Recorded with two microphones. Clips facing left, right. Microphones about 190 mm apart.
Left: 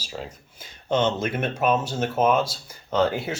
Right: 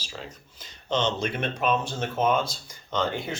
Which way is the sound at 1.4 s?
50° left (ahead or behind).